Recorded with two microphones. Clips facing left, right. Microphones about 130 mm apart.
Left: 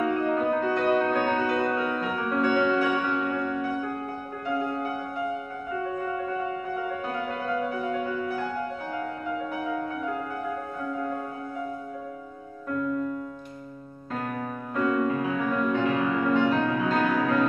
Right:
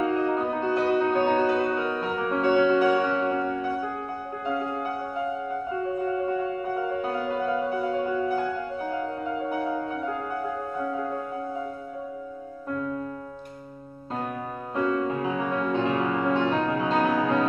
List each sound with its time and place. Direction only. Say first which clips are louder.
0.0 s music: even; 25° right (ahead or behind)
5.7 s music: right 1 dB; 30° right (ahead or behind)
9.5 s music: right 3 dB; 30° right (ahead or behind)
12.6 s music: left 3 dB; 30° right (ahead or behind)
14.8 s music: left 1 dB; 25° right (ahead or behind)